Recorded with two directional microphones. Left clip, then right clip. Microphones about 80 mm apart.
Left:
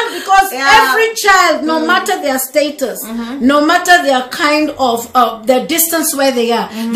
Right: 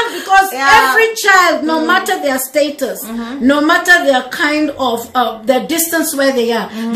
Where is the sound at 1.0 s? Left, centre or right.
Left.